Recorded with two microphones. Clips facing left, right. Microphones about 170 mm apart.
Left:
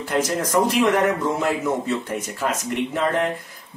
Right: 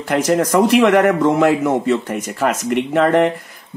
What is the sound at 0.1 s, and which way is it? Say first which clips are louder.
A man's voice: right 6 dB; 75° right (ahead or behind).